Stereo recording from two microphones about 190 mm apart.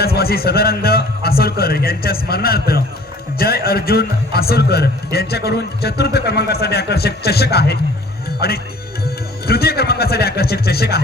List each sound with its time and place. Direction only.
0.0 s a man's voice: 55° left (ahead or behind)